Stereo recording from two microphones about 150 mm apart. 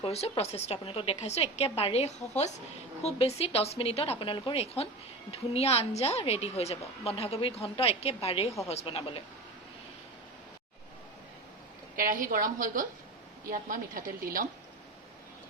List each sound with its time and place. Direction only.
0.0 s a woman's voice: 40° left (ahead or behind)
11.9 s a woman's voice: 65° right (ahead or behind)